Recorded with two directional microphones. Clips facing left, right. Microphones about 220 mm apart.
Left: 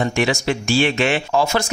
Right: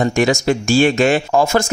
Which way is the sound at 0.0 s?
45° right (ahead or behind).